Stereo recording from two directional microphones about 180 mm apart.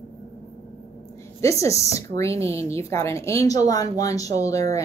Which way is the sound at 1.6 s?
15° left (ahead or behind).